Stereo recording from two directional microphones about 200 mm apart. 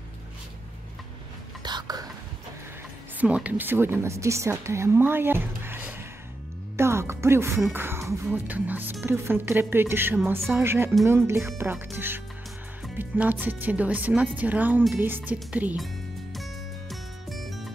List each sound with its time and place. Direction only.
1.6 s whispering: 20° right (ahead or behind)
3.2 s a woman's voice: 5° right (ahead or behind)
6.8 s music: 15° right (ahead or behind)
7.6 s speech: 10° right (ahead or behind)
16.9 s music: centre (ahead or behind)